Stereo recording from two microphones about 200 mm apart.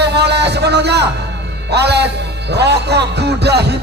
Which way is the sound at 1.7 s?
55° right (ahead or behind).